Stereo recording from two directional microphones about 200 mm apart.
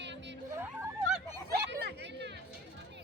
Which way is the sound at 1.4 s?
55° right (ahead or behind).